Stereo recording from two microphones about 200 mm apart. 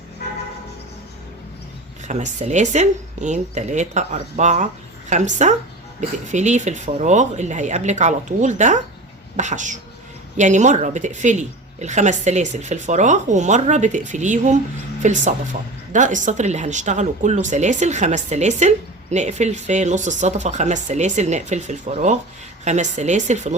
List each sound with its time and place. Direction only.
2.0 s a woman's voice: 35° right (ahead or behind)